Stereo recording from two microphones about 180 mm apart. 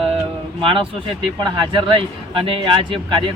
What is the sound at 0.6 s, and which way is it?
Speech, 30° right (ahead or behind).